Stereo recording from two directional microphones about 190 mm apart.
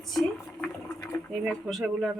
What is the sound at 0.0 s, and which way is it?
Boat, centre (ahead or behind).